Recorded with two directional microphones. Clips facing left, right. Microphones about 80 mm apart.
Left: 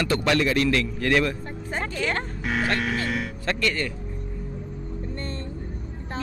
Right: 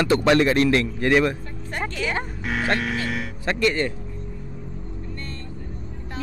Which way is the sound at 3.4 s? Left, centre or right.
Right.